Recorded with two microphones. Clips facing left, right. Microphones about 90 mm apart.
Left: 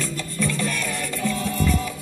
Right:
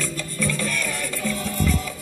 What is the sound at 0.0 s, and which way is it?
Music, 35° left (ahead or behind).